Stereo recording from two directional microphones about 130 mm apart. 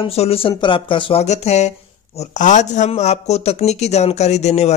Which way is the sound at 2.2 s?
70° left (ahead or behind).